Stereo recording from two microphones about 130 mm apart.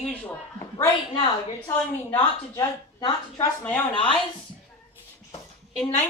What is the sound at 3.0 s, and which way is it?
Speech, 30° left (ahead or behind).